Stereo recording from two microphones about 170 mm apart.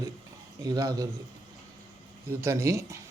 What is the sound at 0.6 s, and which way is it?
Speech, 25° right (ahead or behind).